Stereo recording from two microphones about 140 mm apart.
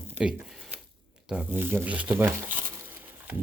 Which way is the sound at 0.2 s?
5° right (ahead or behind).